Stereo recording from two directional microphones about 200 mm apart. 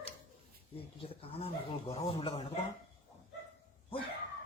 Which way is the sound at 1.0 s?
30° left (ahead or behind).